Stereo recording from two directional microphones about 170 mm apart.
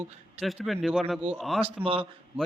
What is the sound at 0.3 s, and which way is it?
A man's voice, centre (ahead or behind).